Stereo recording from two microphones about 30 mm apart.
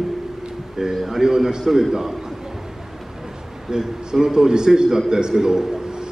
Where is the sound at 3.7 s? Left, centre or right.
Right.